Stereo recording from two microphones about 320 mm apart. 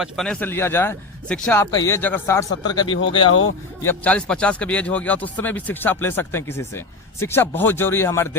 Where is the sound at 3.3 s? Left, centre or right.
Left.